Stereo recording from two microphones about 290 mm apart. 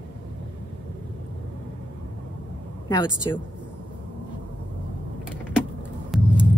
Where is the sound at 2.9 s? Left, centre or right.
Centre.